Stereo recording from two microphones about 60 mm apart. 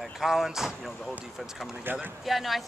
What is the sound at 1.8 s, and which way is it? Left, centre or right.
Speech, right.